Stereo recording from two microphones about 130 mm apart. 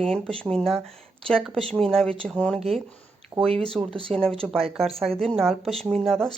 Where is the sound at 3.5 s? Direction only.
50° right (ahead or behind).